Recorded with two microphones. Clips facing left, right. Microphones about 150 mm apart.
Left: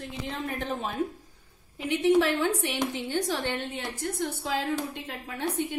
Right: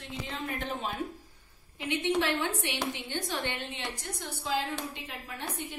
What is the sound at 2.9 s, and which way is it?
Speech, 40° left (ahead or behind).